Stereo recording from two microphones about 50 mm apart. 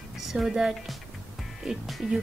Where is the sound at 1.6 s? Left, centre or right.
Centre.